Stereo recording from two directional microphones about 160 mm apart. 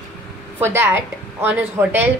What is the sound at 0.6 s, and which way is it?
Speech, 15° right (ahead or behind).